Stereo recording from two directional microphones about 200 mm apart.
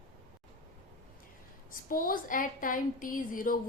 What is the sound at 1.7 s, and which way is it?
A woman's voice, 45° left (ahead or behind).